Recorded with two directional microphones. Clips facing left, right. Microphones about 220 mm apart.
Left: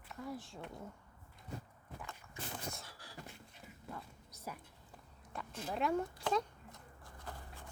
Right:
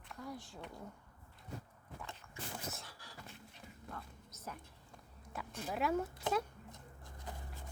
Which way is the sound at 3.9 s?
10° left (ahead or behind).